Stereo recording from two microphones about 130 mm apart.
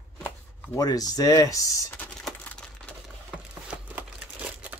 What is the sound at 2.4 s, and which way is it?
Crumpling, 10° left (ahead or behind).